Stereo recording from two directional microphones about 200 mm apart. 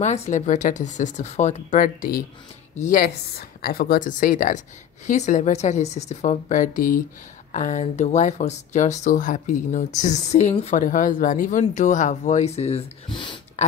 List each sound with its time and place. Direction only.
0.0 s a woman's voice: 35° left (ahead or behind)